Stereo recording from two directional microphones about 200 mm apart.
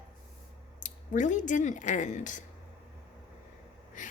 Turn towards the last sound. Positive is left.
turn(degrees=40)  # may be behind; listen again after turning